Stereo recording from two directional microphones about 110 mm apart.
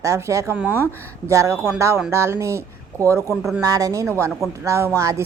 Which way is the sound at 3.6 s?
30° right (ahead or behind).